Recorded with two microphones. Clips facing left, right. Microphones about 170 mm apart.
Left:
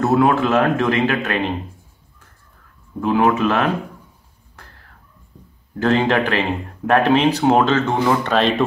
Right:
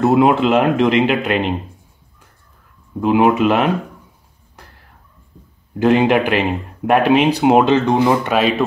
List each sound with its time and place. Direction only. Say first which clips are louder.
0.0 s speech: right 3 dB; 20° right (ahead or behind)
3.0 s speech: right 3 dB; 15° right (ahead or behind)
5.8 s speech: right 4 dB; 15° right (ahead or behind)